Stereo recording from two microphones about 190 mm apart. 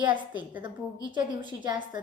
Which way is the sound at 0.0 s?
25° right (ahead or behind).